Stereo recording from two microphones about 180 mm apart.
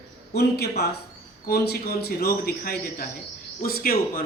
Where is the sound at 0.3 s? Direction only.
65° left (ahead or behind).